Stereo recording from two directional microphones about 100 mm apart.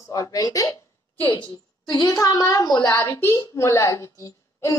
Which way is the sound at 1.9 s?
40° left (ahead or behind).